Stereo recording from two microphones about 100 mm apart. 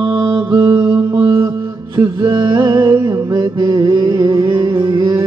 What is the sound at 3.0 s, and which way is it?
Mantra, 40° right (ahead or behind).